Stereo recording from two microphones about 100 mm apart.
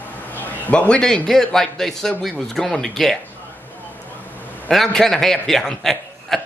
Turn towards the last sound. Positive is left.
turn(degrees=0)  # may be behind; listen again after turning